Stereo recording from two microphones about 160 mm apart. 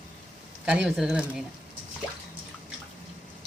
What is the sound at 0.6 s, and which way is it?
Speech, 5° right (ahead or behind).